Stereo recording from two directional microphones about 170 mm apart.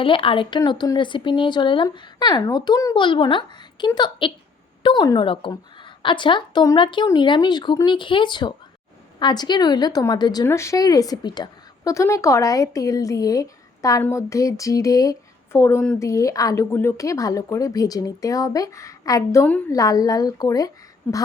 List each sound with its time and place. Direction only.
0.0 s speech: 30° left (ahead or behind)